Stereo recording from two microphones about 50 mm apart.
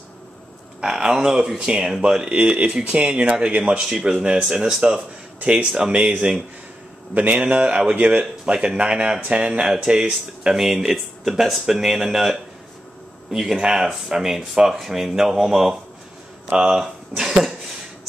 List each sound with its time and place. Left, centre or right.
0.7 s speech: centre
5.4 s speech: right
10.4 s speech: centre
16.4 s speech: right